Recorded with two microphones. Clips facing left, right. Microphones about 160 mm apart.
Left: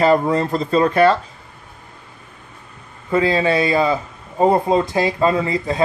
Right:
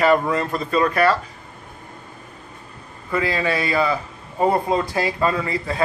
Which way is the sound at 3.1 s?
25° left (ahead or behind).